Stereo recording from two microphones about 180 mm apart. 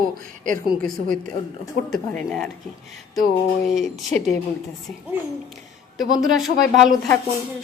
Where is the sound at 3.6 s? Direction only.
Centre (ahead or behind).